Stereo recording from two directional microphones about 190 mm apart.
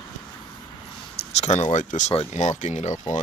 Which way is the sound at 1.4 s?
35° left (ahead or behind).